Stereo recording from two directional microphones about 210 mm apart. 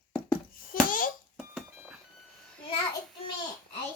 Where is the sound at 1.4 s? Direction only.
5° right (ahead or behind).